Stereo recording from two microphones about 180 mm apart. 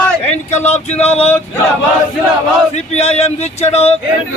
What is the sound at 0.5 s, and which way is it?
Speech, 40° left (ahead or behind).